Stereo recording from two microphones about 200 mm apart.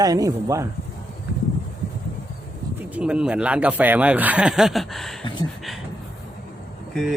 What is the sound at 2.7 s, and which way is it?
Speech, 5° right (ahead or behind).